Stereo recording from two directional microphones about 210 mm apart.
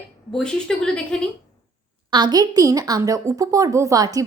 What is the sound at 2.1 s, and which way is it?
A woman's voice, 20° right (ahead or behind).